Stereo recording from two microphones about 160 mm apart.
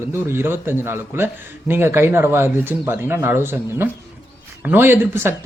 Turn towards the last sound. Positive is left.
turn(degrees=-15)  # may be behind; listen again after turning